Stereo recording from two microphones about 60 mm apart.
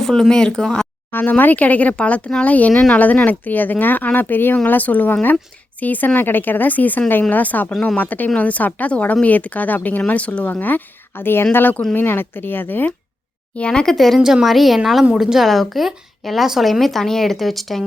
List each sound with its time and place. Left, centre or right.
0.0 s speech: centre
1.1 s speech: left
13.6 s speech: centre
13.9 s speech: centre
14.2 s a woman's voice: centre